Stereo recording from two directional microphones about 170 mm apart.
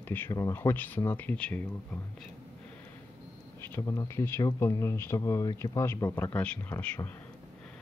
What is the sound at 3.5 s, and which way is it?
Speech, 15° left (ahead or behind).